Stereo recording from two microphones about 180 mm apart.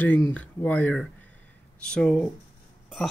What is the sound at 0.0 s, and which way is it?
A woman's voice, 10° left (ahead or behind).